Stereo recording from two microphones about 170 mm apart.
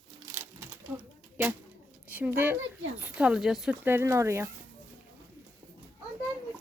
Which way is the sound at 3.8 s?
15° right (ahead or behind).